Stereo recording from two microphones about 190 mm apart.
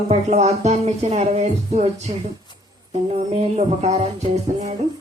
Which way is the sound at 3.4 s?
35° right (ahead or behind).